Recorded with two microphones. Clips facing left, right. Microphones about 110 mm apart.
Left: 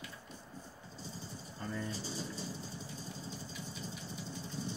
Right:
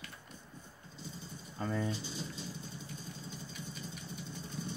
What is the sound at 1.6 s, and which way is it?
Speech, 90° right.